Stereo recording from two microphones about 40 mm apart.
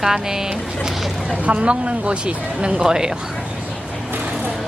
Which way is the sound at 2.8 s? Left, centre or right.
Centre.